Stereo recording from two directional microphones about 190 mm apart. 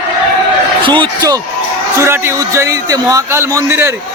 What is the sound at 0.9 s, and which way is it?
A man's voice, 25° right (ahead or behind).